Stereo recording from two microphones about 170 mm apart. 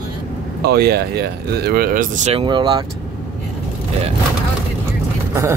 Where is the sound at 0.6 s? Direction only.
65° right (ahead or behind).